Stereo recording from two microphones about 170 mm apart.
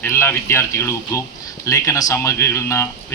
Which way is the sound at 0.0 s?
15° left (ahead or behind).